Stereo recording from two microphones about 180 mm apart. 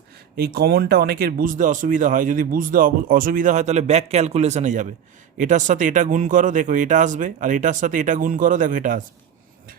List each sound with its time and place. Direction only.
0.3 s speech: 60° right (ahead or behind)